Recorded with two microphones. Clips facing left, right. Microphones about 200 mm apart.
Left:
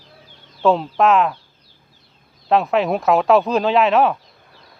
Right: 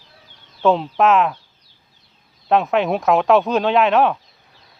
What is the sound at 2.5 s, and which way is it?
Speech, centre (ahead or behind).